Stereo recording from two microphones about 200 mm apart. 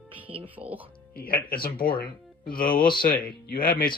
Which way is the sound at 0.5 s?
10° right (ahead or behind).